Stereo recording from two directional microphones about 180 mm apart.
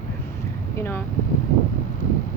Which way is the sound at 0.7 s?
15° left (ahead or behind).